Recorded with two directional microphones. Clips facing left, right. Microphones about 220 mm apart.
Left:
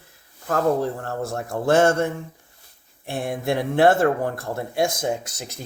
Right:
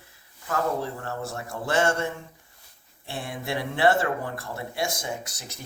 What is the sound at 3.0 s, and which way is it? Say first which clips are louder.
Speech: left 8 dB; 50° left (ahead or behind).